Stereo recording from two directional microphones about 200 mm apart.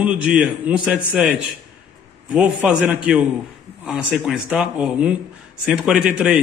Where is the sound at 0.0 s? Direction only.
5° right (ahead or behind).